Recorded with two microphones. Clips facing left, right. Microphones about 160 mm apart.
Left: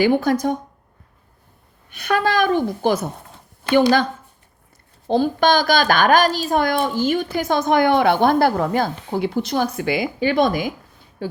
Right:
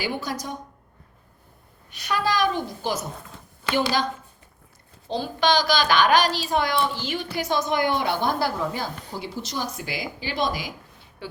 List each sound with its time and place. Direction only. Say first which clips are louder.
0.0 s speech: left 12 dB; 55° left (ahead or behind)
1.9 s speech: left 5 dB; 55° left (ahead or behind)
5.0 s a woman's voice: left 6 dB; 50° left (ahead or behind)
11.2 s speech: left 9 dB; 45° left (ahead or behind)